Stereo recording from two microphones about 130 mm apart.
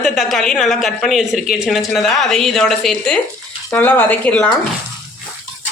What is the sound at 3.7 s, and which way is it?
Speech, 15° left (ahead or behind).